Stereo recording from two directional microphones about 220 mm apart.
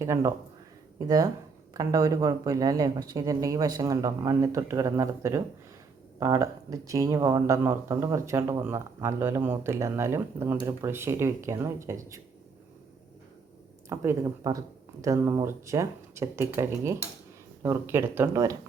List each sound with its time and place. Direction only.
0.0 s speech: 15° right (ahead or behind)
13.9 s speech: 10° right (ahead or behind)